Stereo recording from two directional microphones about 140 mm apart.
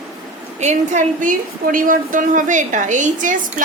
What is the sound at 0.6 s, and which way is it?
A woman's voice, 55° right (ahead or behind).